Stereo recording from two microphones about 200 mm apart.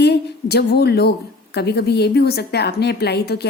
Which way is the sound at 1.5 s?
55° left (ahead or behind).